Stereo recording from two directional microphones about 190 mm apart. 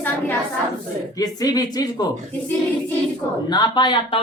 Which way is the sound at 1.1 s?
20° left (ahead or behind).